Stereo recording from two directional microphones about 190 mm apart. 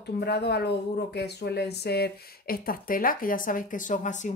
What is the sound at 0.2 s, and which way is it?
Speech, 60° left (ahead or behind).